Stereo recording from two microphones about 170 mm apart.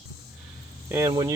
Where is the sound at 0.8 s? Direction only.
15° right (ahead or behind).